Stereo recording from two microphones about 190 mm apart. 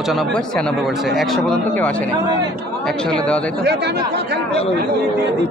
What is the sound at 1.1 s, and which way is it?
Speech, centre (ahead or behind).